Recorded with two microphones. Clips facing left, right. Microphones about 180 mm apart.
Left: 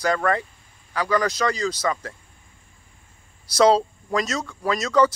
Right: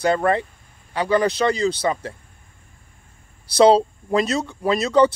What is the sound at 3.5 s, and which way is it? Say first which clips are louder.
Speech: right 3 dB; 30° right (ahead or behind).